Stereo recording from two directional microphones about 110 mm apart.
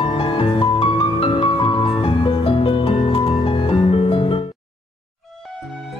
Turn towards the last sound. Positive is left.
turn(degrees=55)  # may be behind; listen again after turning